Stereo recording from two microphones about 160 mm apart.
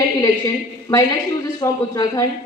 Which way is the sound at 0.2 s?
20° left (ahead or behind).